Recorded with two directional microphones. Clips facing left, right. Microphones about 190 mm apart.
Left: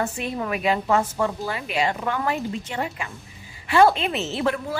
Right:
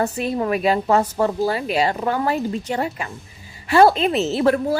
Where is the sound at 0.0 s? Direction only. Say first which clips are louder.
Right 5 dB; 35° right (ahead or behind).